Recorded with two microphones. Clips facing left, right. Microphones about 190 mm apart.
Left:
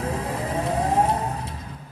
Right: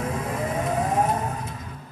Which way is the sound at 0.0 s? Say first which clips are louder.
Even; 35° left (ahead or behind).